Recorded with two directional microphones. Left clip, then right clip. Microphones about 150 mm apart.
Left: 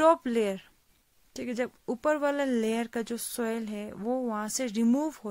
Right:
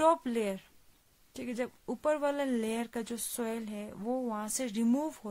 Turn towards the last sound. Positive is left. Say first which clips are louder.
# left 4 dB
turn(degrees=30)  # may be behind; listen again after turning